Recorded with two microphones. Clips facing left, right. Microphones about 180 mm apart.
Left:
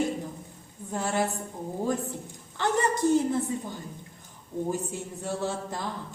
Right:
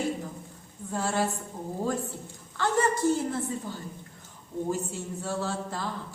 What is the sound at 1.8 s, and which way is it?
A woman's voice, 20° left (ahead or behind).